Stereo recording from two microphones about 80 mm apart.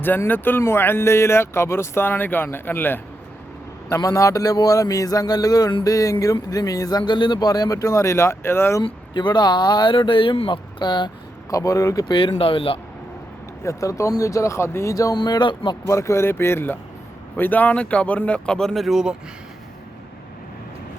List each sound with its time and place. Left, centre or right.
0.3 s speech: left
3.8 s a man's voice: left
7.0 s speech: left
7.8 s speech: left
8.8 s speech: left
11.5 s a man's voice: left
12.0 s speech: left
13.6 s speech: left
14.9 s speech: left
15.9 s speech: left; by 19.1 s centre